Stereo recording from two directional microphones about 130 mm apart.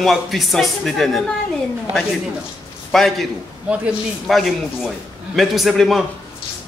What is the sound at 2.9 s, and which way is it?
A man's voice, centre (ahead or behind).